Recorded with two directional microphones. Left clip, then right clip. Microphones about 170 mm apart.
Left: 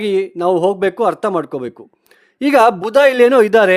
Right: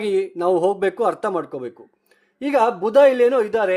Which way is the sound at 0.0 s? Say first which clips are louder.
Left 4 dB; 40° left (ahead or behind).